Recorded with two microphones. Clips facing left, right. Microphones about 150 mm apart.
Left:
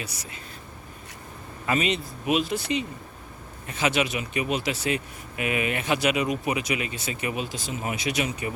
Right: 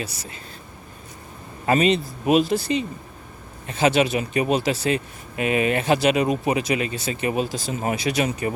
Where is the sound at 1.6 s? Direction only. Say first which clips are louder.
Right 7 dB; 40° right (ahead or behind).